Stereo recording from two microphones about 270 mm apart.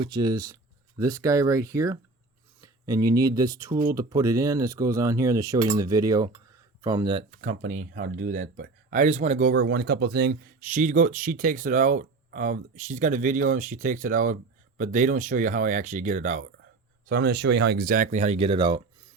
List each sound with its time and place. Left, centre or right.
0.0 s speech: centre